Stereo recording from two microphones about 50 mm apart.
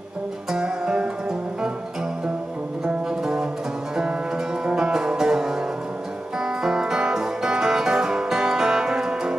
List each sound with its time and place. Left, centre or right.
0.5 s music: centre
2.8 s music: centre